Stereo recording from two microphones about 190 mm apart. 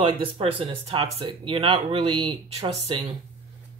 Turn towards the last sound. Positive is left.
turn(degrees=-30)  # may be behind; listen again after turning